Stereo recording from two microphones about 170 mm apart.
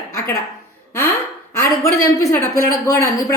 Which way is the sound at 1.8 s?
20° left (ahead or behind).